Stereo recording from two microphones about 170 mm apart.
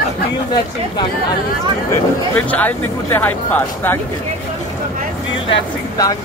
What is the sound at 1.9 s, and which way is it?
Speech, 10° left (ahead or behind).